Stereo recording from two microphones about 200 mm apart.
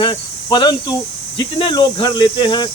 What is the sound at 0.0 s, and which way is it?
Speech, 25° left (ahead or behind).